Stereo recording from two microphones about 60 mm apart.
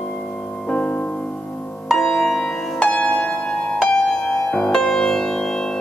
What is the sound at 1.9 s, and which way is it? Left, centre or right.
Music, centre.